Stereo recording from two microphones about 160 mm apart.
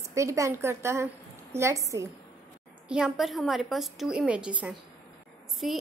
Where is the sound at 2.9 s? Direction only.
5° right (ahead or behind).